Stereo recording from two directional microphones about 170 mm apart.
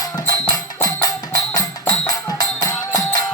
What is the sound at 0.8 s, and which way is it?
Music, 20° left (ahead or behind).